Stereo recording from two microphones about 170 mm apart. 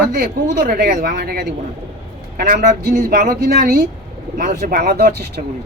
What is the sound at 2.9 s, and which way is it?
Speech, 60° right (ahead or behind).